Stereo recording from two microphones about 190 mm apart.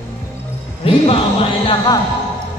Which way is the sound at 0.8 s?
30° left (ahead or behind).